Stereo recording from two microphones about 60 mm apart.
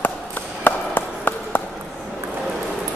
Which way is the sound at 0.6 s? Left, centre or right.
Left.